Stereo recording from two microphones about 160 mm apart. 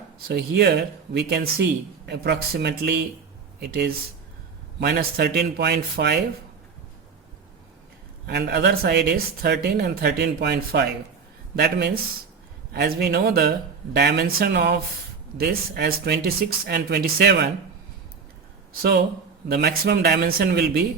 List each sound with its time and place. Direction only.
0.3 s speech: 90° right
8.3 s speech: 90° right
15.4 s speech: 75° right (ahead or behind)
18.7 s speech: 75° right (ahead or behind)
19.5 s speech: 90° right